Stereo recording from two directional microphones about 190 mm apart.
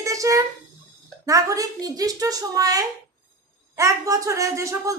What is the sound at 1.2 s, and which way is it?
Speech, 15° right (ahead or behind).